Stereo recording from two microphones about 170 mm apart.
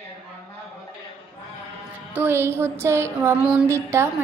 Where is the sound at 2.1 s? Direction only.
15° right (ahead or behind).